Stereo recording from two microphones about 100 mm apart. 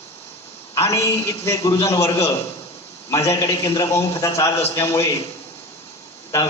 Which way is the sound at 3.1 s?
35° left (ahead or behind).